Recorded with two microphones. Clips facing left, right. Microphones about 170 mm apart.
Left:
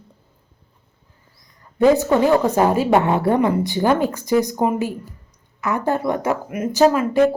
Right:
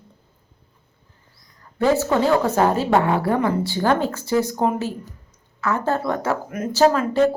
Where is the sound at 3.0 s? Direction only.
25° left (ahead or behind).